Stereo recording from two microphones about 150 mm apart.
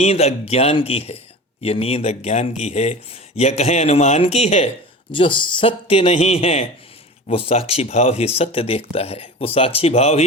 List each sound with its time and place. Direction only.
0.0 s speech: 45° left (ahead or behind)
5.1 s speech: 35° left (ahead or behind)